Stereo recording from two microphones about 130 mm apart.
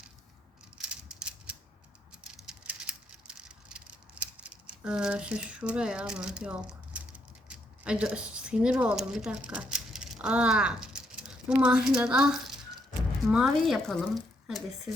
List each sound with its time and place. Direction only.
0.8 s mechanisms: 5° right (ahead or behind)
2.2 s a sound: 5° right (ahead or behind)
7.4 s speech: 10° right (ahead or behind)